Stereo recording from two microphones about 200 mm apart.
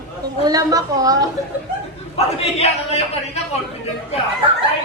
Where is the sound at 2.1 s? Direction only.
30° left (ahead or behind).